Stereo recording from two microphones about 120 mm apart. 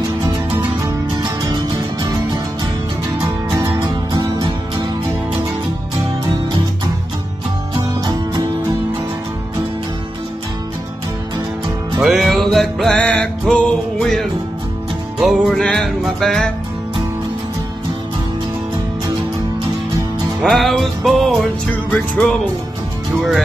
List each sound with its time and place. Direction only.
3.6 s music: 35° right (ahead or behind)
8.0 s music: 30° right (ahead or behind)
12.0 s music: centre (ahead or behind)
20.4 s music: centre (ahead or behind)